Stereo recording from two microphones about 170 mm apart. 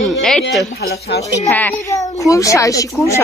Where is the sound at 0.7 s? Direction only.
70° left (ahead or behind).